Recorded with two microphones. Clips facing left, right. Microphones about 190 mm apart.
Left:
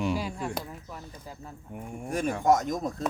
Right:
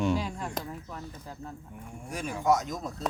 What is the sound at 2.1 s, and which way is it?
Speech, 50° left (ahead or behind).